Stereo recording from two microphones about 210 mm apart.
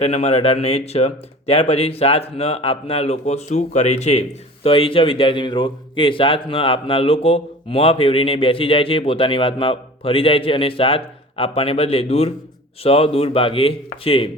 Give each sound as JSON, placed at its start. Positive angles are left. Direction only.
{"t": 0.0, "sound": "a man's voice", "side_deg": 30}